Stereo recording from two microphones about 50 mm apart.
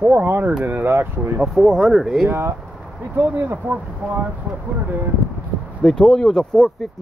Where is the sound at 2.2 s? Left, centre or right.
Right.